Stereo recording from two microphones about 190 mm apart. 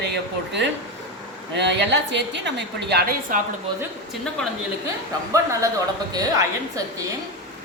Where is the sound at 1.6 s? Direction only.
65° right (ahead or behind).